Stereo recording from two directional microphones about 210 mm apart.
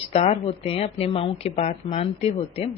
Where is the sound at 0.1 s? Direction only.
30° left (ahead or behind).